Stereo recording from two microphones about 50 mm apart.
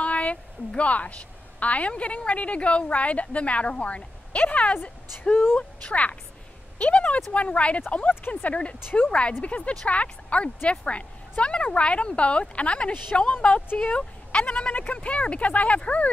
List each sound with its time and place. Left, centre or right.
0.0 s a sound: left
0.7 s a woman's voice: left
5.3 s speech: left
5.6 s a woman's voice: left
14.7 s a woman's voice: left